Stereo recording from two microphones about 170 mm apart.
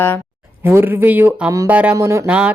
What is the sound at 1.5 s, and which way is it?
Speech, 20° right (ahead or behind).